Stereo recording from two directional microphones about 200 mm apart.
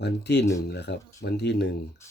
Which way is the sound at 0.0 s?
55° left (ahead or behind).